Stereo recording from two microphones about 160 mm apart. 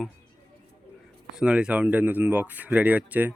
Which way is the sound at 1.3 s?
5° right (ahead or behind).